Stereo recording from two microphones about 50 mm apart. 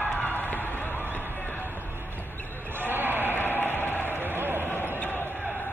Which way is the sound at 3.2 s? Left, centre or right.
Left.